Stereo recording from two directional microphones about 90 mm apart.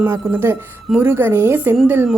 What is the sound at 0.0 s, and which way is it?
A woman's voice, 20° right (ahead or behind).